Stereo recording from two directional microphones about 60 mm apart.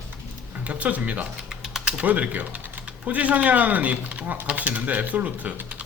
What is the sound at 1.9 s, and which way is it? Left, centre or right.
Speech, right.